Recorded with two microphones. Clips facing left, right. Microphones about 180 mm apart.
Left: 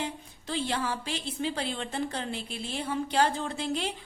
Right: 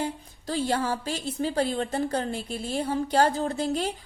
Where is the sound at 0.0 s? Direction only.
40° right (ahead or behind).